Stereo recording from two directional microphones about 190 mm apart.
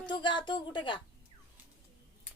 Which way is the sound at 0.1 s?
25° left (ahead or behind).